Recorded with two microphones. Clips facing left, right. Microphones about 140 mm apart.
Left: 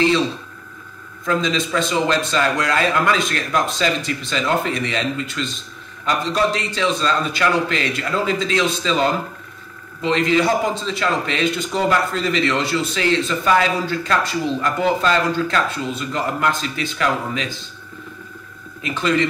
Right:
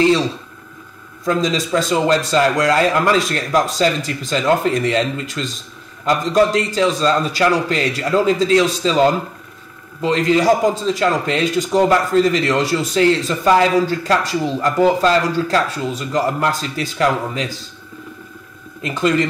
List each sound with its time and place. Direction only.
1.2 s a man's voice: 40° right (ahead or behind)
10.0 s a man's voice: 40° right (ahead or behind)
18.8 s a man's voice: 40° right (ahead or behind)